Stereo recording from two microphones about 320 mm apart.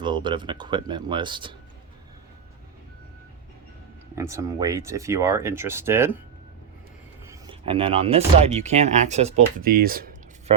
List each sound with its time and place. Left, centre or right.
0.0 s speech: centre
4.1 s speech: centre
7.3 s speech: centre